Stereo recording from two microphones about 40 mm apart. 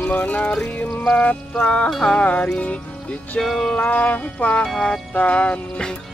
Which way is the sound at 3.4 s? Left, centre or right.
Centre.